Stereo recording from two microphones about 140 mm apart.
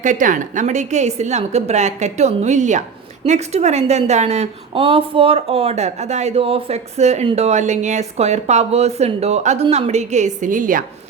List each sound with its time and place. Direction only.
0.0 s a woman's voice: 65° right (ahead or behind)